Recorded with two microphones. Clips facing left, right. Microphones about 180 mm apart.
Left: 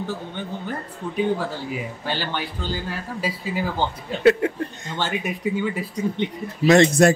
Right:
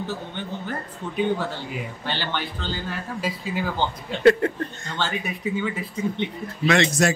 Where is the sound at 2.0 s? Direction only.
10° left (ahead or behind).